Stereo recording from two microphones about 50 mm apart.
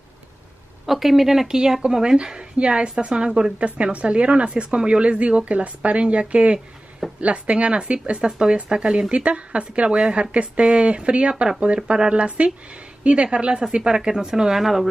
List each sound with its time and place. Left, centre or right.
0.8 s speech: centre